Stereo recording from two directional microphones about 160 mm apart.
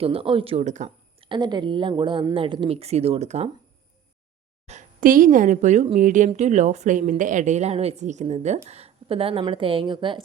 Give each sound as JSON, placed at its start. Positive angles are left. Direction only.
{"t": 0.0, "sound": "speech", "side_deg": -35}
{"t": 1.3, "sound": "a woman's voice", "side_deg": -25}
{"t": 4.6, "sound": "a woman's voice", "side_deg": -45}